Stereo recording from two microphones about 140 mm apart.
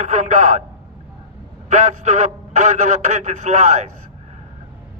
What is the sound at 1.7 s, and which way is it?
Speech, 60° right (ahead or behind).